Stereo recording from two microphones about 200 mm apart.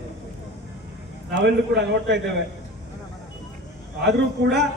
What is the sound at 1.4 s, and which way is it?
Speech, 60° right (ahead or behind).